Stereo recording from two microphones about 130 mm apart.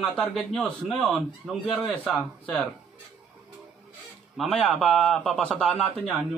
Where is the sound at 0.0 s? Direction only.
Centre (ahead or behind).